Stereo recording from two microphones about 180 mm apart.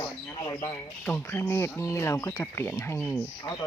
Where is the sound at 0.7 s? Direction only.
10° left (ahead or behind).